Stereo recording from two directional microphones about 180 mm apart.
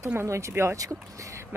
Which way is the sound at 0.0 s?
15° right (ahead or behind).